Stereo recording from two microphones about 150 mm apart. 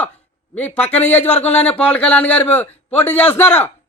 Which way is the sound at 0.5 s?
10° left (ahead or behind).